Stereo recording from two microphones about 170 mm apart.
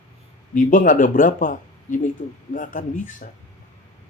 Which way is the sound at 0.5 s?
50° left (ahead or behind).